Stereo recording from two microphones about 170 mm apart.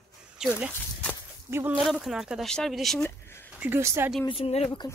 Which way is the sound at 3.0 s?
15° left (ahead or behind).